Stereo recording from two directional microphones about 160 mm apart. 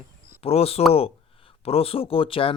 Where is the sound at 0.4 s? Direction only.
40° left (ahead or behind).